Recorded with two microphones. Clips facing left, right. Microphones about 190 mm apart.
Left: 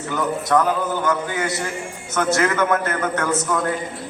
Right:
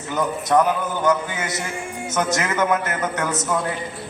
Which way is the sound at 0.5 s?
20° right (ahead or behind).